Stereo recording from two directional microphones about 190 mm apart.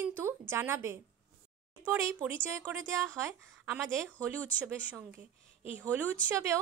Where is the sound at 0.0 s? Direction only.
10° right (ahead or behind).